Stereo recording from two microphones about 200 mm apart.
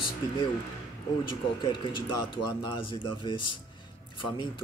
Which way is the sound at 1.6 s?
25° left (ahead or behind).